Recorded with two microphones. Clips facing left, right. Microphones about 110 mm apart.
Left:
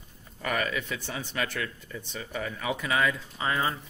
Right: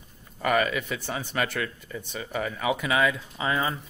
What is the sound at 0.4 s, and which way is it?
Speech, 65° right (ahead or behind).